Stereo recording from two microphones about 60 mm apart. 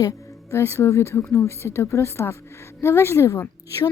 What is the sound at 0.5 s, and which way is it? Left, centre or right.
Speech, left.